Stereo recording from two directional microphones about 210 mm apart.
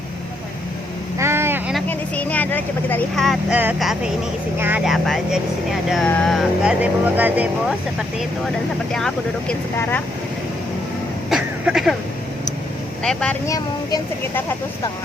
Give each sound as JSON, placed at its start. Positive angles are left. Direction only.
{"t": 1.2, "sound": "vehicle", "side_deg": -10}
{"t": 1.9, "sound": "speech", "side_deg": 10}
{"t": 8.9, "sound": "speech", "side_deg": 5}
{"t": 11.3, "sound": "a sound", "side_deg": 0}
{"t": 13.0, "sound": "speech", "side_deg": 5}
{"t": 13.5, "sound": "speech", "side_deg": 15}